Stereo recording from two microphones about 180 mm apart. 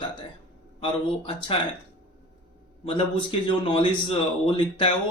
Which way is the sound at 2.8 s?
30° left (ahead or behind).